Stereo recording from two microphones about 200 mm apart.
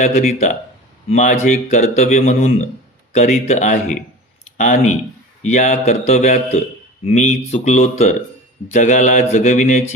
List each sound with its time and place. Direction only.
0.0 s speech: 35° left (ahead or behind)